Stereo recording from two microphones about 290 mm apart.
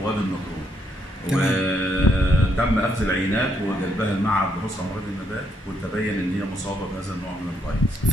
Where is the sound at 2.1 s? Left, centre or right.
Left.